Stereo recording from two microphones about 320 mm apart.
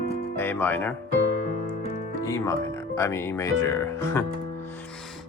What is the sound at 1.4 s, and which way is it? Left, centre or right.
Music, left.